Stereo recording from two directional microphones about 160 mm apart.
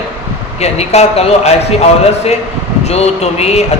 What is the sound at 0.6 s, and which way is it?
A man's voice, 40° left (ahead or behind).